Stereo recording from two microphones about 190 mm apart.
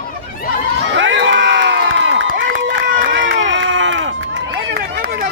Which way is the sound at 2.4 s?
85° right.